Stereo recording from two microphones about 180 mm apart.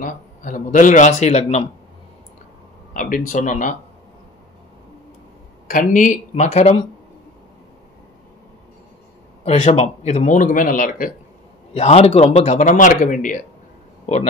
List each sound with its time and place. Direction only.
0.0 s speech: 45° left (ahead or behind)
2.9 s speech: 45° left (ahead or behind)
5.7 s a man's voice: 45° left (ahead or behind)
9.4 s speech: 35° left (ahead or behind)
11.7 s a man's voice: 35° left (ahead or behind)